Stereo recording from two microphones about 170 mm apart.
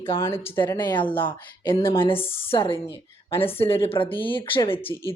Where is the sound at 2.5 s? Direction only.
30° left (ahead or behind).